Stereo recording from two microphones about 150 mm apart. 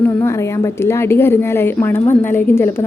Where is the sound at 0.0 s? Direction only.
15° left (ahead or behind).